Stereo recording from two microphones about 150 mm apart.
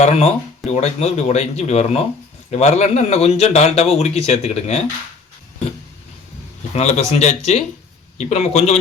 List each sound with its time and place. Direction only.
0.0 s a man's voice: 45° left (ahead or behind)
6.7 s a man's voice: 45° left (ahead or behind)